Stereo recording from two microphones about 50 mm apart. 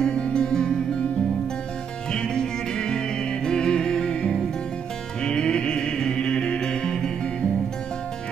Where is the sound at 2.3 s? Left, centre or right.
Centre.